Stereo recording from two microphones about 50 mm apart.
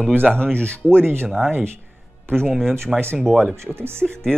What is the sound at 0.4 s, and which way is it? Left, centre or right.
Speech, left.